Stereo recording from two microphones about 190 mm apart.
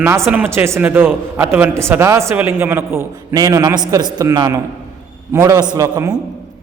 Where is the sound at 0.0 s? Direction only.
15° right (ahead or behind).